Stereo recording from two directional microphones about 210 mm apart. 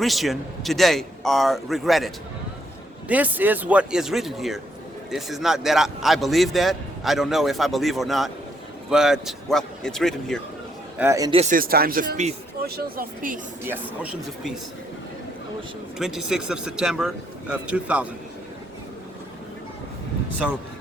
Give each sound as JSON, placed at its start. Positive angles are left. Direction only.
{"t": 0.0, "sound": "a man's voice", "side_deg": 0}
{"t": 10.9, "sound": "speech", "side_deg": -10}
{"t": 11.3, "sound": "speech", "side_deg": -40}
{"t": 13.7, "sound": "a man's voice", "side_deg": -5}
{"t": 16.0, "sound": "a man's voice", "side_deg": 0}